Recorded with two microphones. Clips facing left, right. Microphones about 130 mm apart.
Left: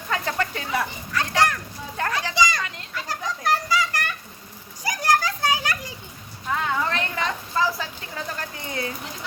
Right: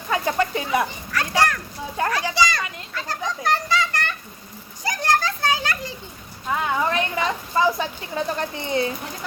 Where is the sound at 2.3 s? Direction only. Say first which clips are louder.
Left 3 dB; 15° left (ahead or behind).